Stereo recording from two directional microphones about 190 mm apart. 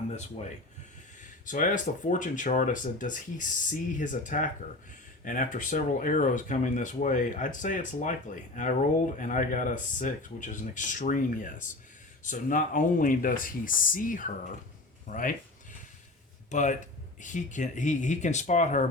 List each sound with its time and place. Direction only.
1.5 s speech: 45° left (ahead or behind)
9.1 s speech: 45° left (ahead or behind)
16.5 s speech: 40° left (ahead or behind)